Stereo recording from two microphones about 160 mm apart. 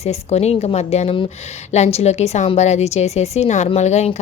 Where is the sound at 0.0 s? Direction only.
40° left (ahead or behind).